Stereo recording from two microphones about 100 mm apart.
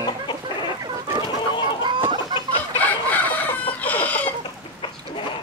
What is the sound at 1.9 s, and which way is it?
Chicken, 60° right (ahead or behind).